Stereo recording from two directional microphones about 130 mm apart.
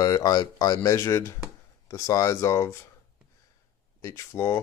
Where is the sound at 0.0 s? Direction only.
30° left (ahead or behind).